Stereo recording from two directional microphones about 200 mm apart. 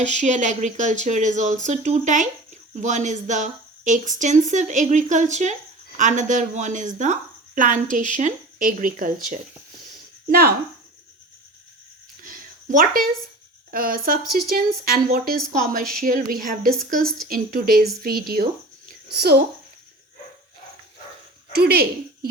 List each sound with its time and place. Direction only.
0.0 s speech: 35° right (ahead or behind)
12.2 s a sound: 45° right (ahead or behind)
13.7 s speech: 45° right (ahead or behind)
15.8 s a woman's voice: centre (ahead or behind)
16.3 s speech: 45° right (ahead or behind)
18.9 s a sound: 50° right (ahead or behind)
21.5 s speech: 50° right (ahead or behind)